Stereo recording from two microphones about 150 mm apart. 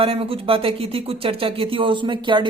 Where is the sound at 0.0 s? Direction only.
40° right (ahead or behind).